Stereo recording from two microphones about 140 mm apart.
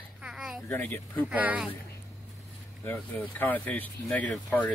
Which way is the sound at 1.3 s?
10° right (ahead or behind).